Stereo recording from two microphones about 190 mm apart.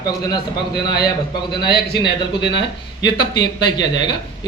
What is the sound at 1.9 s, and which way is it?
Speech, 25° left (ahead or behind).